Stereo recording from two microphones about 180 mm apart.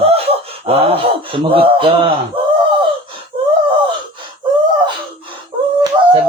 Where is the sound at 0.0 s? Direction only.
35° right (ahead or behind).